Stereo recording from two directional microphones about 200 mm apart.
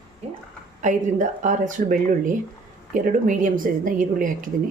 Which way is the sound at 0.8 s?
40° right (ahead or behind).